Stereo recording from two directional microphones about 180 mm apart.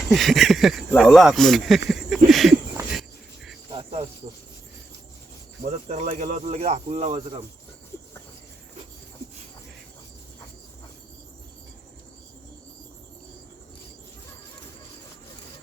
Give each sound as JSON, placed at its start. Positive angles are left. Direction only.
{"t": 0.1, "sound": "speech", "side_deg": 0}
{"t": 2.9, "sound": "cricket", "side_deg": 0}
{"t": 5.6, "sound": "speech", "side_deg": -35}